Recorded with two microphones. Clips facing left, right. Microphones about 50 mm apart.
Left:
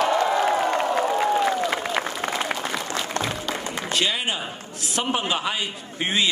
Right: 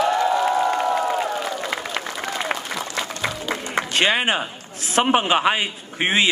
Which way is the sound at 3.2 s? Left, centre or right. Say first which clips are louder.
Left 1 dB; left.